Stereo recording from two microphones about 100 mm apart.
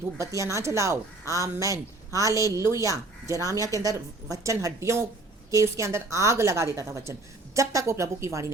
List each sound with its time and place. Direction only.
0.2 s a woman's voice: 30° right (ahead or behind)